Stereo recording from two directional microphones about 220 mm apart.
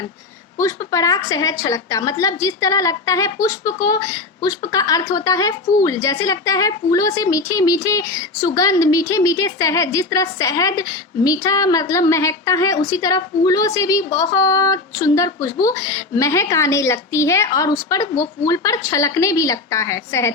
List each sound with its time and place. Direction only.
0.6 s a woman's voice: 15° left (ahead or behind)